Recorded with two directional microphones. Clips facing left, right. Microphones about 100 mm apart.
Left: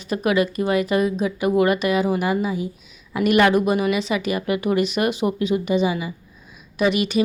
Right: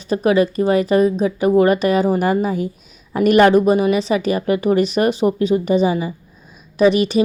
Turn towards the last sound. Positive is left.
turn(degrees=-35)  # may be behind; listen again after turning